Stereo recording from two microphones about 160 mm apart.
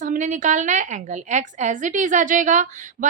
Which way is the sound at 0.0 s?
50° right (ahead or behind).